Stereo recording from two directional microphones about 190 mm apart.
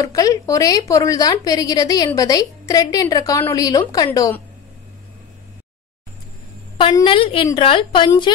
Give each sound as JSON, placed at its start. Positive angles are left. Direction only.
{"t": 0.0, "sound": "a woman's voice", "side_deg": 20}
{"t": 6.8, "sound": "a woman's voice", "side_deg": 25}